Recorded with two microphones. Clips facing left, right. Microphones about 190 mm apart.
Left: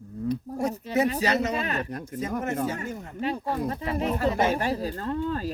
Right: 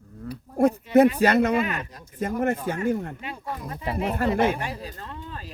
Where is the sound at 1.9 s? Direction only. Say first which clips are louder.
Left 12 dB; 65° left (ahead or behind).